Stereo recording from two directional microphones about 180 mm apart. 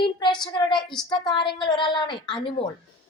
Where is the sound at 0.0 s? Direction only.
25° left (ahead or behind).